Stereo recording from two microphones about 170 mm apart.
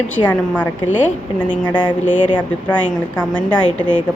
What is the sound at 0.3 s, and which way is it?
Speech, 10° left (ahead or behind).